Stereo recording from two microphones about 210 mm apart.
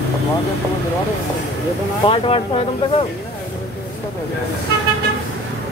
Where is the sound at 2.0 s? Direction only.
25° left (ahead or behind).